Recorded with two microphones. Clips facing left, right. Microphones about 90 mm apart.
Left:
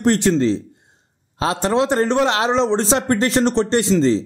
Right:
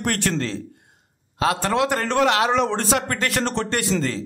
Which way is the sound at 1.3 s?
25° left (ahead or behind).